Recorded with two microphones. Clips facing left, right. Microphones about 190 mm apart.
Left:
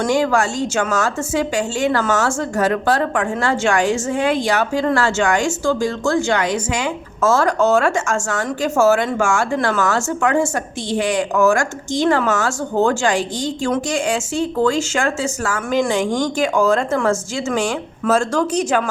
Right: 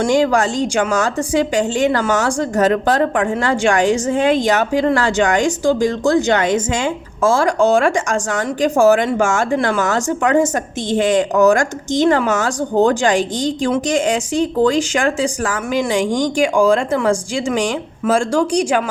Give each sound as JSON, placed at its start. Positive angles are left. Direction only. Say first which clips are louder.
{"t": 0.0, "sound": "speech", "louder": "right 2 dB", "side_deg": -20}
{"t": 7.2, "sound": "speech", "louder": "right 1 dB", "side_deg": -10}